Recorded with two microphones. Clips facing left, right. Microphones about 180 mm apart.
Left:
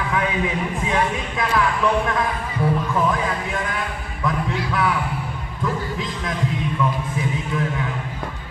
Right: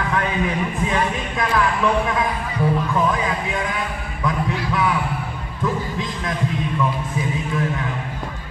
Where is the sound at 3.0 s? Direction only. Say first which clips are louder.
Right 1 dB; centre (ahead or behind).